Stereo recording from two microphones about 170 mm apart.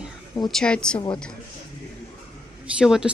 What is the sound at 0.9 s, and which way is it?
Speech, 30° left (ahead or behind).